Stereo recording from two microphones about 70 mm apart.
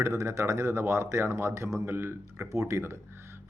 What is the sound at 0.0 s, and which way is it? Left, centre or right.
Speech, right.